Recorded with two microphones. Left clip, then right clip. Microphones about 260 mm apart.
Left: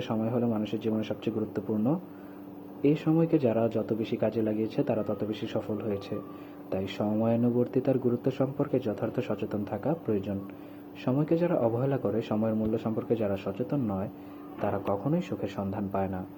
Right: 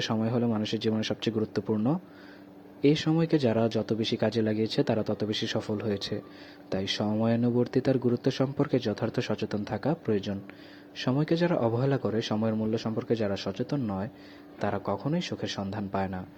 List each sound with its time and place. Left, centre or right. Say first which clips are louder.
0.0 s speech: right 1 dB; right